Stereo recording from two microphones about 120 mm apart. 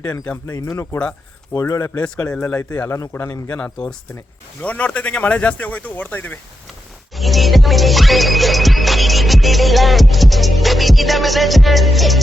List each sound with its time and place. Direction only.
0.0 s speech: 10° left (ahead or behind)
0.4 s a man's voice: 25° left (ahead or behind)
2.0 s a man's voice: 10° left (ahead or behind)
3.6 s speech: 5° left (ahead or behind)
7.2 s music: centre (ahead or behind)